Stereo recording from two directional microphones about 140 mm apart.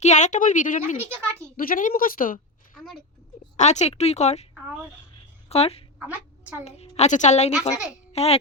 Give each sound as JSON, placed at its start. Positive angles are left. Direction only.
{"t": 0.0, "sound": "a woman's voice", "side_deg": 55}
{"t": 1.1, "sound": "speech", "side_deg": -20}
{"t": 1.5, "sound": "speech", "side_deg": 80}
{"t": 2.7, "sound": "a sound", "side_deg": 5}
{"t": 3.6, "sound": "a woman's voice", "side_deg": 55}
{"t": 5.5, "sound": "speech", "side_deg": 45}
{"t": 6.0, "sound": "a sound", "side_deg": -10}
{"t": 6.7, "sound": "a woman's voice", "side_deg": 50}